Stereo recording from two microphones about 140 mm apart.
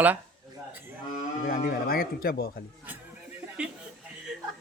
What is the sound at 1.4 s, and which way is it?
Speech, 90° left.